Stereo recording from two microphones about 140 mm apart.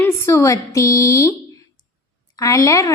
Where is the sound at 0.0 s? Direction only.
20° left (ahead or behind).